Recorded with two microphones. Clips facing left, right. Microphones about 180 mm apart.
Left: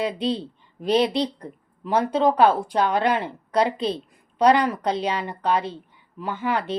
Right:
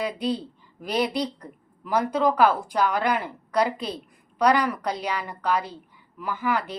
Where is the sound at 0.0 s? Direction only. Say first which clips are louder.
Left 2 dB; 25° left (ahead or behind).